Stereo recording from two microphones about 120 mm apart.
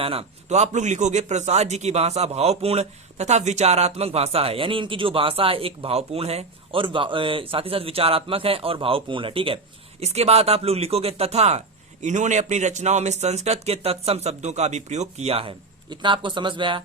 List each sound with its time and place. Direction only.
0.0 s a man's voice: 55° right (ahead or behind)
10.0 s speech: 65° right (ahead or behind)
12.0 s a man's voice: 85° right; by 15.5 s 55° right (ahead or behind)
15.9 s a man's voice: 40° right (ahead or behind)